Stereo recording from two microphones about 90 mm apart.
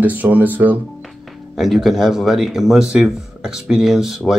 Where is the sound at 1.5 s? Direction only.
Centre (ahead or behind).